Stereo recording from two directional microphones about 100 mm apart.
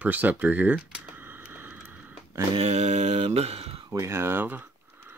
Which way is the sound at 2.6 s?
90° right.